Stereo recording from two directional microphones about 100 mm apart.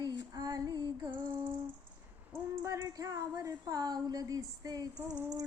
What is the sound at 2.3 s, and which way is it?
Female singing, 25° right (ahead or behind).